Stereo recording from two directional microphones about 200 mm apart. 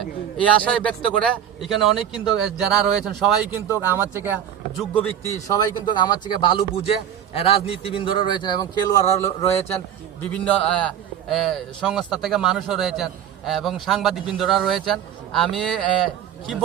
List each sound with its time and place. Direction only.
0.0 s a man's voice: 5° left (ahead or behind); by 4.4 s 10° right (ahead or behind)
5.5 s a man's voice: 20° left (ahead or behind)
9.4 s a man's voice: 30° left (ahead or behind)
10.3 s a man's voice: 5° left (ahead or behind)